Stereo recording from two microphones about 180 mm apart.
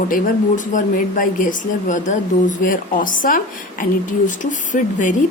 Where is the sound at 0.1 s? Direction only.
45° left (ahead or behind).